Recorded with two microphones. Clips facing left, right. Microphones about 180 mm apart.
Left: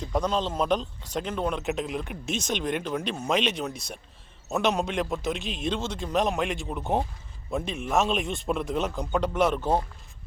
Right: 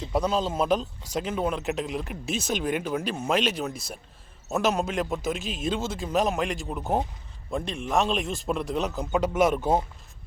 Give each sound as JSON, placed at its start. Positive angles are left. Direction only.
{"t": 0.0, "sound": "speech", "side_deg": -5}